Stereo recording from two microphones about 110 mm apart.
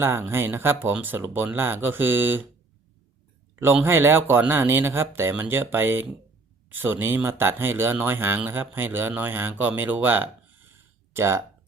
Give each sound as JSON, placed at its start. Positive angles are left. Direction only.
{"t": 0.0, "sound": "speech", "side_deg": -20}
{"t": 3.5, "sound": "speech", "side_deg": -20}